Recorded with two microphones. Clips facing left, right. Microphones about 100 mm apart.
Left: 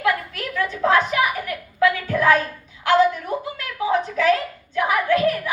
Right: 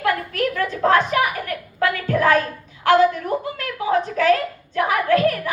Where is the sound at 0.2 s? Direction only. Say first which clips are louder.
Right 4 dB; 45° right (ahead or behind).